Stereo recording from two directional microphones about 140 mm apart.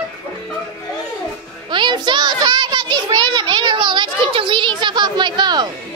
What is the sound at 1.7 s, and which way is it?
A child's voice, 35° right (ahead or behind).